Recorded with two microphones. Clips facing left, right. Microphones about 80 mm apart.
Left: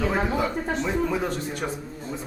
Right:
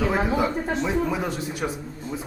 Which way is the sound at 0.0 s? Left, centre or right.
Centre.